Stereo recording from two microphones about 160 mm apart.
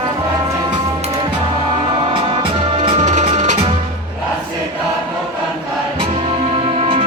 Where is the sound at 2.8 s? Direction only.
45° right (ahead or behind).